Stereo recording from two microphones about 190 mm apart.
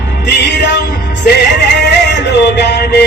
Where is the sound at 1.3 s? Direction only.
65° left (ahead or behind).